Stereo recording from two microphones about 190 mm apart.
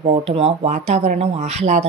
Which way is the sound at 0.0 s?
30° right (ahead or behind).